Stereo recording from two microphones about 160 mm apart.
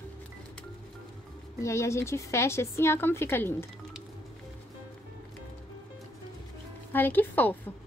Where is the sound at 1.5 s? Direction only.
20° left (ahead or behind).